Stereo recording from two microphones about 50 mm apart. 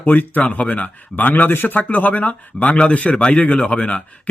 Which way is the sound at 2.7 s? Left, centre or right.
Centre.